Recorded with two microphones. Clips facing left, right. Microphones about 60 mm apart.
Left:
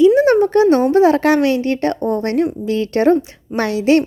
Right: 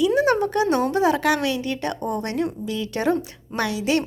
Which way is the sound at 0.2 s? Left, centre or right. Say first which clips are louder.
Left 8 dB; left.